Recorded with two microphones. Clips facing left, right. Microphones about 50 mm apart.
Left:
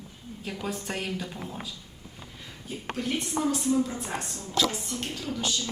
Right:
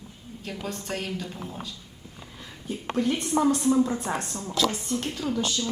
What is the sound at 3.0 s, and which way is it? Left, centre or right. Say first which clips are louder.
Speech: right 7 dB; right.